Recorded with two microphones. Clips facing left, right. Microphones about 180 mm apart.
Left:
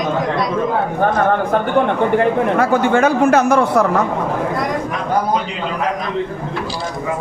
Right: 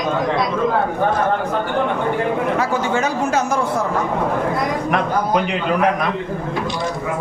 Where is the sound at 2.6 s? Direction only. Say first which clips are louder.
Left 5 dB; 55° left (ahead or behind).